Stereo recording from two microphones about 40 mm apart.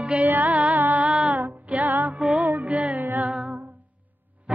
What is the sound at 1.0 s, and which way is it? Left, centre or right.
Child singing, right.